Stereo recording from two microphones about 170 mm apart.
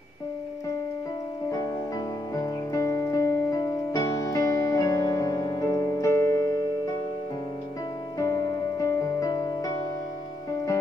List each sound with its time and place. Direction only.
2.3 s music: 20° left (ahead or behind)
8.2 s music: 15° left (ahead or behind)